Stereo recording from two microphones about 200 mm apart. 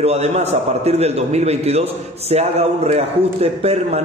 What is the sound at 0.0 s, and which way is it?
A man's voice, 35° right (ahead or behind).